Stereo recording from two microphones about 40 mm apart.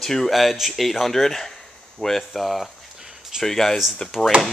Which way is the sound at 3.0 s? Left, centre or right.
Centre.